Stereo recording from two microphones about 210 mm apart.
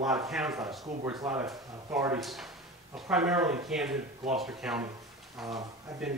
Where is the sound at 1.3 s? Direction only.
10° right (ahead or behind).